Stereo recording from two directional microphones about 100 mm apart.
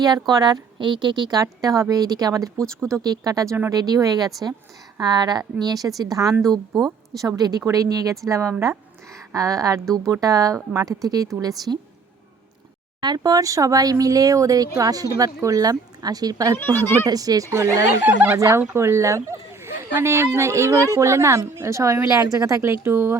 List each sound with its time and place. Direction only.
0.0 s speech: 40° right (ahead or behind)
6.7 s a woman's voice: centre (ahead or behind)
7.2 s speech: 40° right (ahead or behind)
9.8 s a woman's voice: 5° left (ahead or behind)
10.1 s speech: 35° right (ahead or behind)
13.0 s speech: 45° right (ahead or behind)
16.6 s speech: 20° left (ahead or behind)
17.1 s speech: 40° right (ahead or behind)
18.0 s speech: 15° right (ahead or behind)
18.3 s speech: 35° right (ahead or behind)
22.6 s speech: 25° right (ahead or behind)